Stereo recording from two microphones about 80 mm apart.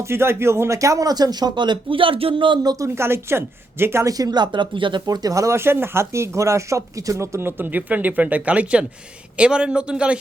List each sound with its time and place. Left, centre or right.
0.0 s speech: right
2.6 s speech: right
4.0 s speech: right
5.0 s speech: right; by 10.2 s centre